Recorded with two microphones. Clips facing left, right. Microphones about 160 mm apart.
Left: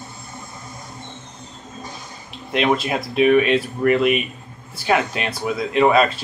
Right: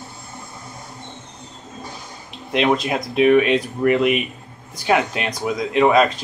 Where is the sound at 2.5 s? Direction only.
15° right (ahead or behind).